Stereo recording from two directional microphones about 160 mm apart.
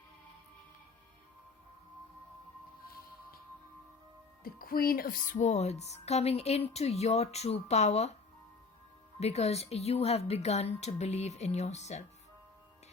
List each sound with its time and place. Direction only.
4.4 s speech: 65° left (ahead or behind); by 8.1 s 45° left (ahead or behind)
9.2 s speech: 40° left (ahead or behind)